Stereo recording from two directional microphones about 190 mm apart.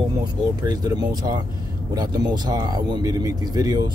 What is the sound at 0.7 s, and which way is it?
Speech, 20° right (ahead or behind).